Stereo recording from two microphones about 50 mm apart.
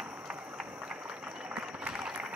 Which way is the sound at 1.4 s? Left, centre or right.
Right.